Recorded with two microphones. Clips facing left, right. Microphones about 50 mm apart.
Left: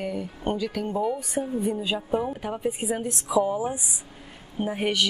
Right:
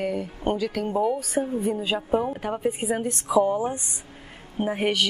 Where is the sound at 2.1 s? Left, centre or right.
Centre.